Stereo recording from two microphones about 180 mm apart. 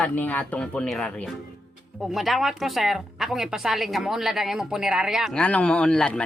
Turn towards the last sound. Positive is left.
turn(degrees=5)  # may be behind; listen again after turning